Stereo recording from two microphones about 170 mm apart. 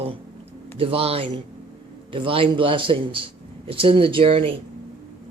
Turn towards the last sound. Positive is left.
turn(degrees=-30)  # may be behind; listen again after turning